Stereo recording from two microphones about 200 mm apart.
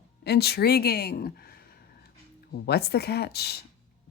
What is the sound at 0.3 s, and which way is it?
A woman's voice, 55° left (ahead or behind).